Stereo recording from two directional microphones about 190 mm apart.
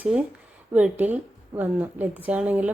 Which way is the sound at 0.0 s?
5° right (ahead or behind).